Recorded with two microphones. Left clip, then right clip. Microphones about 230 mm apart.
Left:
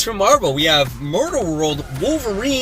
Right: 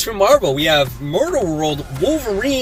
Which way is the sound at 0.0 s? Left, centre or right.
Centre.